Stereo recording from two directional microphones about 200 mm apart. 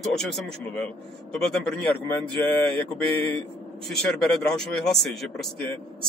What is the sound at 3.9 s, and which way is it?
Speech, 5° left (ahead or behind).